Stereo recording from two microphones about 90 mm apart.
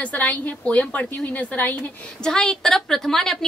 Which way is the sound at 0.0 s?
15° left (ahead or behind).